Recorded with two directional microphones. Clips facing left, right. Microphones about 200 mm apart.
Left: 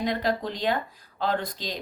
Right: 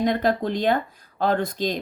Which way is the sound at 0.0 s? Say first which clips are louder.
Right 5 dB; 50° right (ahead or behind).